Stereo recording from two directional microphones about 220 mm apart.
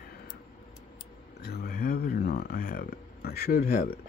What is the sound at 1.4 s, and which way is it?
Speech, 45° left (ahead or behind).